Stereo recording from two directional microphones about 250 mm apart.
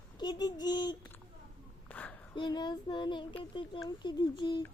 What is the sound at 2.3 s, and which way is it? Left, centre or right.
Speech, centre.